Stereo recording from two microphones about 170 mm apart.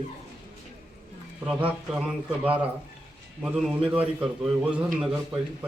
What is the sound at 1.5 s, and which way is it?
A man's voice, 10° right (ahead or behind).